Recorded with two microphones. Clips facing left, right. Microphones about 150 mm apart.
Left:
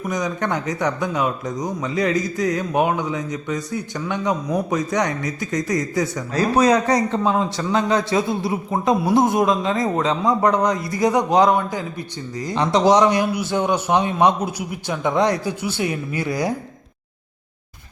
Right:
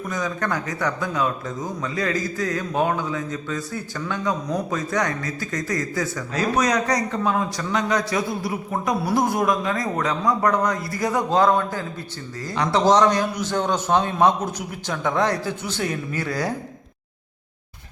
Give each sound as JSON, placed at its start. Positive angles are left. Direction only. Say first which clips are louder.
{"t": 0.1, "sound": "speech", "louder": "left 3 dB", "side_deg": 20}
{"t": 6.3, "sound": "a man's voice", "louder": "left 5 dB", "side_deg": 30}